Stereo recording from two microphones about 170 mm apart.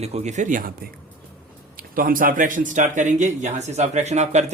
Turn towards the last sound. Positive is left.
turn(degrees=-40)  # may be behind; listen again after turning